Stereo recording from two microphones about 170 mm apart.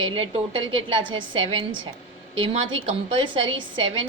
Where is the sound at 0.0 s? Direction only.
35° right (ahead or behind).